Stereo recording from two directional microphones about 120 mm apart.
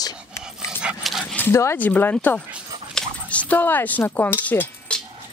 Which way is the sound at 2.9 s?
10° left (ahead or behind).